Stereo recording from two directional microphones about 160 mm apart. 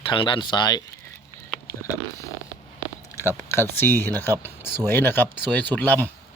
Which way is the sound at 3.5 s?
15° left (ahead or behind).